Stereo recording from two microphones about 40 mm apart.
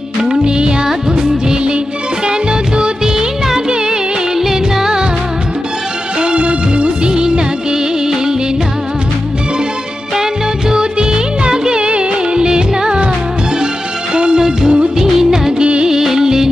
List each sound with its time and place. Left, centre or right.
0.2 s music: centre
2.8 s music of bollywood: centre
4.4 s music: centre
6.2 s music of bollywood: right
10.7 s music of bollywood: centre
14.1 s music: right
15.0 s music of bollywood: centre
15.6 s music of bollywood: right
15.9 s music: centre